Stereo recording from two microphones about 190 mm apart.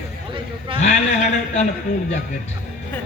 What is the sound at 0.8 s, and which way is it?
Speech, 35° left (ahead or behind).